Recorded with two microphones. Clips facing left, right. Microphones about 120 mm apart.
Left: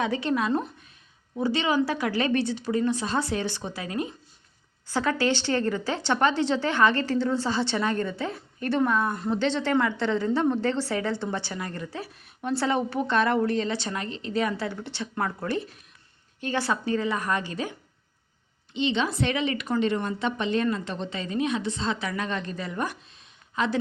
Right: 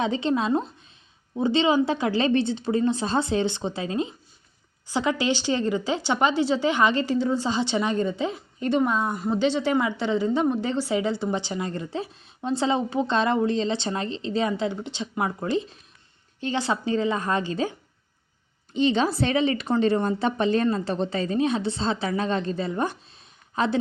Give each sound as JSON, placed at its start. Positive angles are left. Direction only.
{"t": 0.0, "sound": "a woman's voice", "side_deg": -25}
{"t": 18.7, "sound": "a woman's voice", "side_deg": -40}